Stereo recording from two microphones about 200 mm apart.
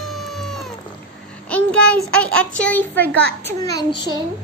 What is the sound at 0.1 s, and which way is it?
Cat, centre (ahead or behind).